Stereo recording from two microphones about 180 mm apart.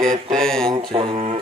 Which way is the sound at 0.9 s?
30° right (ahead or behind).